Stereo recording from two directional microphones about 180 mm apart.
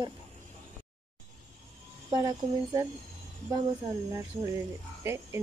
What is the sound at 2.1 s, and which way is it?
Speech, 20° right (ahead or behind).